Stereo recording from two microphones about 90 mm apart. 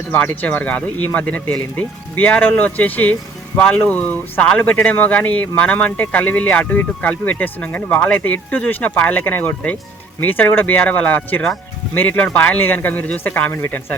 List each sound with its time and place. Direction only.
0.1 s speech: 15° left (ahead or behind)